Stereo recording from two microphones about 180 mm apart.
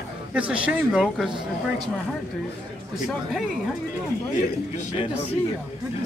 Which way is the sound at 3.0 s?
Centre (ahead or behind).